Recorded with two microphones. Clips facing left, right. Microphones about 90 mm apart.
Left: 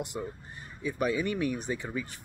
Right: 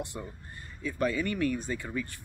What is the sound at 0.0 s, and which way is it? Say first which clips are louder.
Speech: left 3 dB; 20° left (ahead or behind).